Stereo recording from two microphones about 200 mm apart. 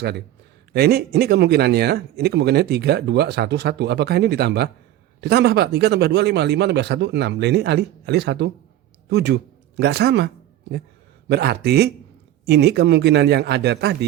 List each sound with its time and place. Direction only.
0.7 s speech: 50° right (ahead or behind)
11.3 s speech: 55° right (ahead or behind)